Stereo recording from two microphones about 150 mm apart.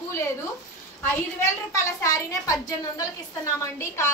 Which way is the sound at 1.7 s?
20° left (ahead or behind).